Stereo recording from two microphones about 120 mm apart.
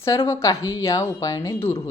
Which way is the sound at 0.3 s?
30° left (ahead or behind).